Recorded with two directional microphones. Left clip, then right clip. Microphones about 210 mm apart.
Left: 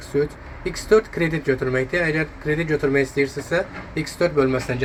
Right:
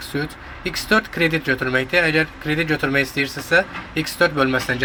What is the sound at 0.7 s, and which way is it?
Speech, 25° right (ahead or behind).